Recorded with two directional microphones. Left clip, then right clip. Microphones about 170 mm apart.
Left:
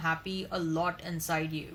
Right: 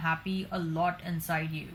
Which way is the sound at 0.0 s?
50° left (ahead or behind).